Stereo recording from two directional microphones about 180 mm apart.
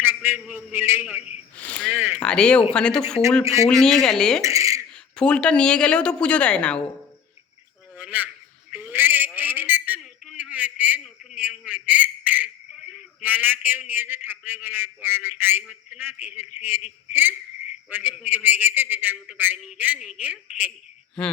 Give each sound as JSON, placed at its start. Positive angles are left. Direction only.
{"t": 0.0, "sound": "a man's voice", "side_deg": -10}
{"t": 1.5, "sound": "a sound", "side_deg": 10}
{"t": 2.2, "sound": "a woman's voice", "side_deg": 5}
{"t": 3.4, "sound": "a man's voice", "side_deg": -15}
{"t": 3.7, "sound": "a woman's voice", "side_deg": 0}
{"t": 4.4, "sound": "a sound", "side_deg": -15}
{"t": 5.1, "sound": "a woman's voice", "side_deg": 5}
{"t": 7.9, "sound": "a sound", "side_deg": -10}
{"t": 17.8, "sound": "a man's voice", "side_deg": -10}